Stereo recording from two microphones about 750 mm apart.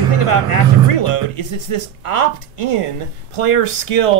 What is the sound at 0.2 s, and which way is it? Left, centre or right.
Speech, left.